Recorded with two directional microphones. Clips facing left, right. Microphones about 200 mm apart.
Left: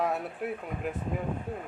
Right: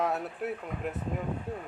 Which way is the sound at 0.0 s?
Centre (ahead or behind).